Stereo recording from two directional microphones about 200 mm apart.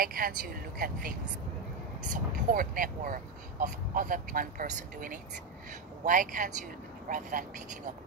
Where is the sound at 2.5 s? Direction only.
45° right (ahead or behind).